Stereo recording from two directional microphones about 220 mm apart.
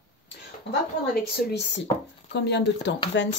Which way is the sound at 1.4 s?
50° left (ahead or behind).